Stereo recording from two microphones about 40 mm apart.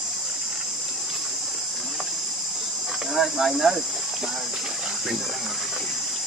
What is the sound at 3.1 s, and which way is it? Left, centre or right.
Speech, centre.